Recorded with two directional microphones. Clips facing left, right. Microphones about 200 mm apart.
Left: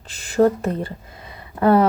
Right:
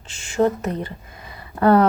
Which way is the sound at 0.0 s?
35° left (ahead or behind).